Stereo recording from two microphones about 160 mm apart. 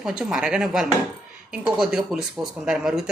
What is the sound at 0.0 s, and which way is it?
Speech, 5° right (ahead or behind).